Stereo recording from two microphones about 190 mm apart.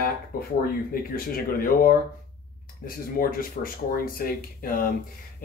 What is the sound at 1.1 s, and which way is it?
Speech, 50° left (ahead or behind).